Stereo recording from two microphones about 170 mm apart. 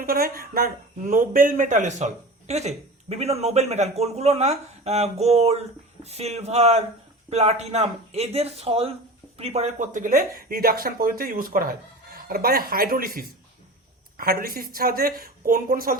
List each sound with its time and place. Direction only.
0.0 s speech: 60° right (ahead or behind)